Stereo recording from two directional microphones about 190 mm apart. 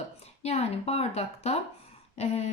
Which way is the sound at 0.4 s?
35° left (ahead or behind).